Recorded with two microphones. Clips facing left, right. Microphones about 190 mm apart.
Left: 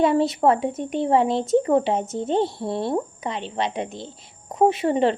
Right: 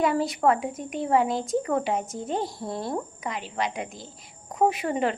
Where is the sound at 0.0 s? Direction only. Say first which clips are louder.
Left 4 dB; 25° left (ahead or behind).